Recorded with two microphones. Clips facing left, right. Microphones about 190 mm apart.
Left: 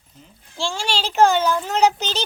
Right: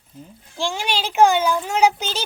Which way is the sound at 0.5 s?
15° right (ahead or behind).